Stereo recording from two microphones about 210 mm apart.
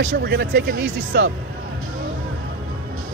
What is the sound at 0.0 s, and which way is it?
Speech, 55° right (ahead or behind).